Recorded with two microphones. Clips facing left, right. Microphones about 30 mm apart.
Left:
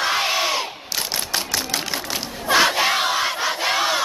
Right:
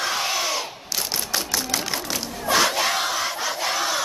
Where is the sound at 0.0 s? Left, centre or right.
Left.